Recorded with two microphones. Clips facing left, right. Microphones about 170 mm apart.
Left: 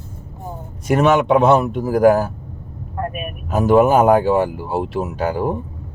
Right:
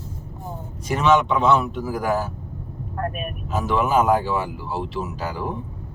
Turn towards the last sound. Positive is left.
turn(degrees=50)  # may be behind; listen again after turning